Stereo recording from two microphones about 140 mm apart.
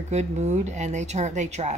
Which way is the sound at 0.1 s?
55° right (ahead or behind).